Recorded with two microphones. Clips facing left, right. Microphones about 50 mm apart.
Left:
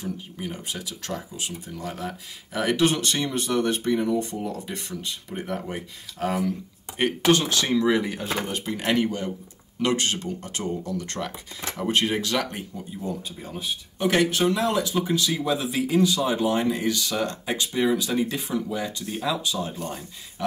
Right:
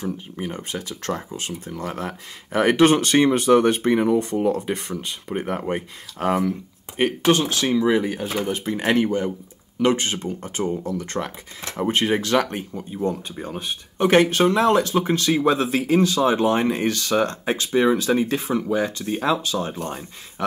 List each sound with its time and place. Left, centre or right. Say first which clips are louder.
0.0 s speech: right 4 dB; right
4.6 s speech: right 7 dB; right
6.1 s speech: right 4 dB; right
7.0 s speech: right 2 dB; centre; by 12.8 s right
13.0 s speech: right 8 dB; right
13.5 s speech: even; right